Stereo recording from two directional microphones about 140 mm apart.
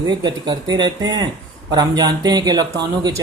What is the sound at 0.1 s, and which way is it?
Speech, 30° right (ahead or behind).